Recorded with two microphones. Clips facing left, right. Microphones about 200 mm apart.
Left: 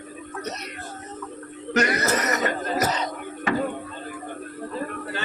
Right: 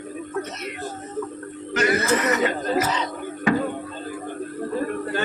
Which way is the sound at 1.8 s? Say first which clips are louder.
Right 2 dB; 40° left (ahead or behind).